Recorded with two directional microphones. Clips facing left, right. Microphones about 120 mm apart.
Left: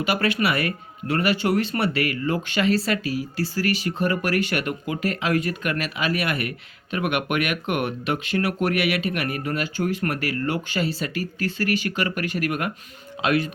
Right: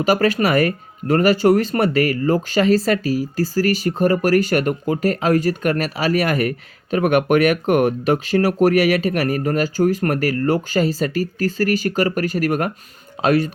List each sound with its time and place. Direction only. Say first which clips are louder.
0.0 s speech: right 6 dB; 40° right (ahead or behind)